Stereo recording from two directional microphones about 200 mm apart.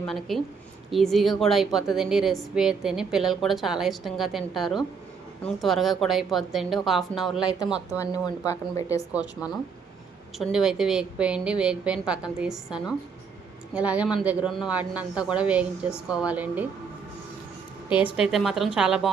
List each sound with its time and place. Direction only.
0.0 s a woman's voice: centre (ahead or behind)
7.9 s speech: 20° left (ahead or behind)
10.3 s a woman's voice: centre (ahead or behind)
17.8 s a woman's voice: 5° right (ahead or behind)